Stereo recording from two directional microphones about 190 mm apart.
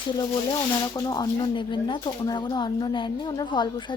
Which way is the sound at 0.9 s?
20° left (ahead or behind).